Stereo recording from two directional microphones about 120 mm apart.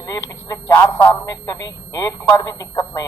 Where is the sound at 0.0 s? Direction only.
30° left (ahead or behind).